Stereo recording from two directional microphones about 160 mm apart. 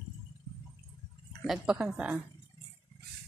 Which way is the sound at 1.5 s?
5° right (ahead or behind).